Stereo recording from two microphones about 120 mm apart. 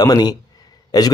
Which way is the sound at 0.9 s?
30° left (ahead or behind).